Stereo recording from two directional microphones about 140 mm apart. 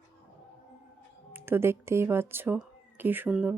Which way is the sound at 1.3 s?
15° right (ahead or behind).